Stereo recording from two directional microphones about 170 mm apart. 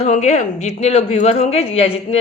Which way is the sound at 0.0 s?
40° left (ahead or behind).